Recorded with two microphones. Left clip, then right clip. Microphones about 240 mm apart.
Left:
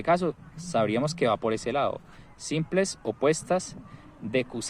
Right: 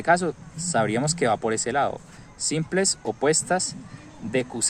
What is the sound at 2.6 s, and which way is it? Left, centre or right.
Speech, centre.